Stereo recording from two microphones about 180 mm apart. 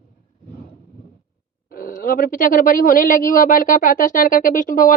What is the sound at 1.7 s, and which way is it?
Speech, 50° left (ahead or behind).